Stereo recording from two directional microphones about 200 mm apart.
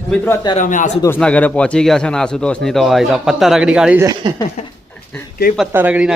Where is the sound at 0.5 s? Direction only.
40° left (ahead or behind).